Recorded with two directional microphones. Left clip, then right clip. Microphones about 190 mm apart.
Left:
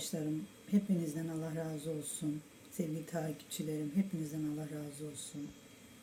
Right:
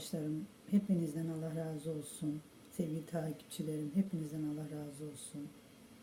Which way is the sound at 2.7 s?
20° right (ahead or behind).